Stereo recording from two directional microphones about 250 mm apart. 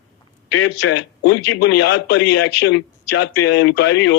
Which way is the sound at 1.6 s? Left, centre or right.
Left.